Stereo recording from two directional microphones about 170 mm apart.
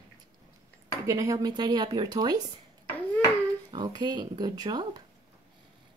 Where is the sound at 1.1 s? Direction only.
20° right (ahead or behind).